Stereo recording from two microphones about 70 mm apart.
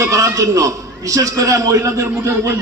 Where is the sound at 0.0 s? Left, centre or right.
Right.